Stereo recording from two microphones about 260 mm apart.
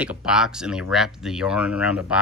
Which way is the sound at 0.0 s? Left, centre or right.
Centre.